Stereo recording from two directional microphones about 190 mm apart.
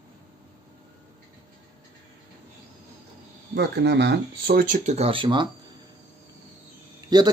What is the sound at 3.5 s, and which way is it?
Speech, 65° right (ahead or behind).